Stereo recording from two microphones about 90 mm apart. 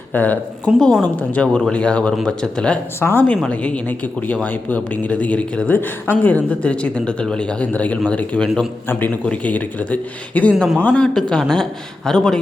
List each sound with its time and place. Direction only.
0.1 s speech: 15° left (ahead or behind)
0.8 s a woman's voice: 5° left (ahead or behind)
3.0 s speech: 25° left (ahead or behind)
3.5 s speech: 15° left (ahead or behind)